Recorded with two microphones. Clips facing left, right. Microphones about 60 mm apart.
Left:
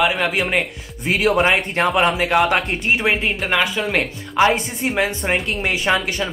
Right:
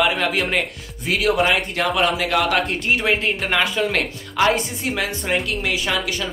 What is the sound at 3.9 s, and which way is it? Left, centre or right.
A woman's voice, left.